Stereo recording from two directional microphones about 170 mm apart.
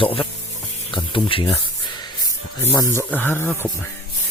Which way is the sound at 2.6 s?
15° left (ahead or behind).